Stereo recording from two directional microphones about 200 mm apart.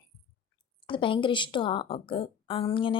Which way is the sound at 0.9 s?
25° left (ahead or behind).